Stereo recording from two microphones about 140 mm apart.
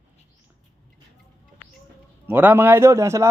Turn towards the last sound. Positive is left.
turn(degrees=-20)  # may be behind; listen again after turning